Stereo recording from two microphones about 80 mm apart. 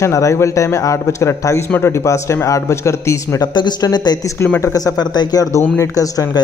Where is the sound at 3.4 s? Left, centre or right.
Left.